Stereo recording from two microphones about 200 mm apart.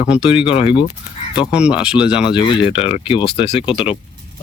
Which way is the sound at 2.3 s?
25° left (ahead or behind).